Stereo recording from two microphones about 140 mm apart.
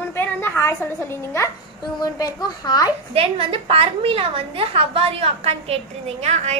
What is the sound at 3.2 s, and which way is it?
A woman's voice, 40° right (ahead or behind).